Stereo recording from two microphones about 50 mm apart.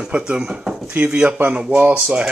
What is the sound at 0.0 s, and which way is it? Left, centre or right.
Speech, centre.